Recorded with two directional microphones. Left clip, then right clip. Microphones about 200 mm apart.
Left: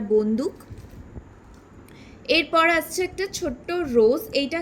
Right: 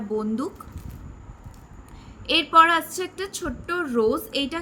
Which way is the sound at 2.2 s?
10° left (ahead or behind).